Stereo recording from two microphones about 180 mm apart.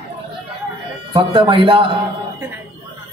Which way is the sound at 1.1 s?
30° right (ahead or behind).